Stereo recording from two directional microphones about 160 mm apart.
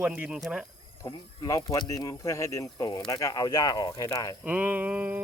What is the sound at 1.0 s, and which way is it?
Speech, 20° left (ahead or behind).